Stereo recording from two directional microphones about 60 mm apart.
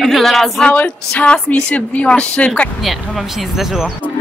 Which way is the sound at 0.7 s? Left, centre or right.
Left.